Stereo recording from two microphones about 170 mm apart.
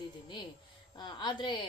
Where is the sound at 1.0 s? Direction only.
25° left (ahead or behind).